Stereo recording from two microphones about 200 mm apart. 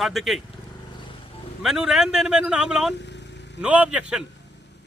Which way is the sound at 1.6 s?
Centre (ahead or behind).